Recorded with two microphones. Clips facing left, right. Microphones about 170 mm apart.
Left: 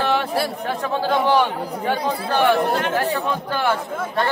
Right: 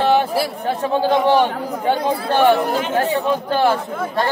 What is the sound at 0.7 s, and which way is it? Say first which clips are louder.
Speech: right 4 dB; 30° right (ahead or behind).